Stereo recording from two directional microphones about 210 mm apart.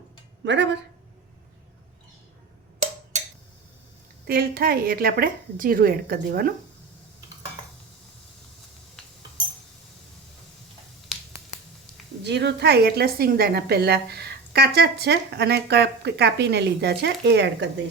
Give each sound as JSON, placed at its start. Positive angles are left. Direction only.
{"t": 0.4, "sound": "speech", "side_deg": -55}
{"t": 4.3, "sound": "a woman's voice", "side_deg": -45}
{"t": 12.2, "sound": "a woman's voice", "side_deg": -55}